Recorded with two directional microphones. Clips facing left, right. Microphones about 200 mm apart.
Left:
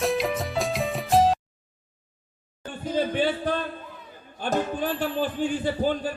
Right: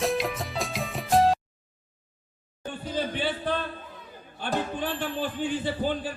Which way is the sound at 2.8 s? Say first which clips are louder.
Left 5 dB; 50° left (ahead or behind).